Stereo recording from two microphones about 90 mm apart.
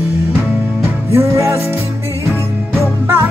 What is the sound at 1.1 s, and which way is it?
Music, 30° right (ahead or behind).